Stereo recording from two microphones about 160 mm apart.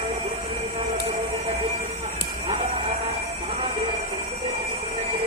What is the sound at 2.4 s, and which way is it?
Train, 45° right (ahead or behind).